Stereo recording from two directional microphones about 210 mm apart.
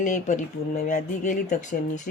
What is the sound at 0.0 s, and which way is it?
Speech, 35° left (ahead or behind).